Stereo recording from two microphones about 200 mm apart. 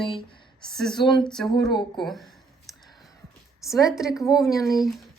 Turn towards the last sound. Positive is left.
turn(degrees=0)  # may be behind; listen again after turning